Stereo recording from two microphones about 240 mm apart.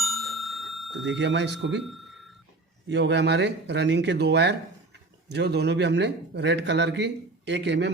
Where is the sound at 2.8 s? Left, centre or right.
Right.